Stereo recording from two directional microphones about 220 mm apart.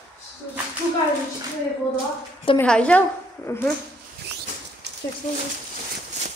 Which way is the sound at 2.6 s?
5° left (ahead or behind).